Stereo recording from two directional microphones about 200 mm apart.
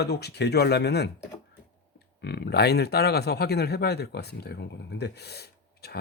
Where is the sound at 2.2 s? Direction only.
55° left (ahead or behind).